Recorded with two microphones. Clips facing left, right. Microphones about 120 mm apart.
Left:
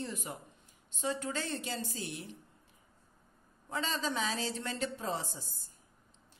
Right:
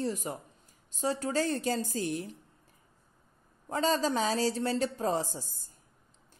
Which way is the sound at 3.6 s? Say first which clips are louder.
Right 7 dB; 40° right (ahead or behind).